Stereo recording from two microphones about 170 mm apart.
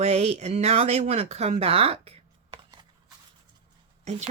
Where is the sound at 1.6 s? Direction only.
35° right (ahead or behind).